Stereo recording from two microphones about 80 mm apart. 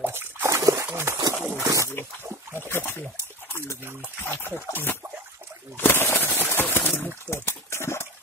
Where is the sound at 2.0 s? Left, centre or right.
Left.